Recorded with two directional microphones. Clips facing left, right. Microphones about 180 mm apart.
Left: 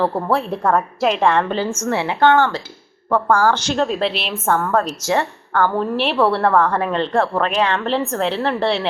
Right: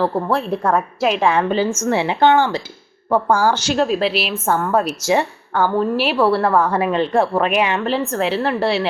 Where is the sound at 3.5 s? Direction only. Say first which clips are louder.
Right 1 dB; 5° right (ahead or behind).